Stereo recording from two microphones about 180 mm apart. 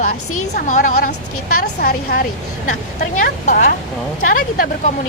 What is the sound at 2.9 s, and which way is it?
Speech, 45° left (ahead or behind).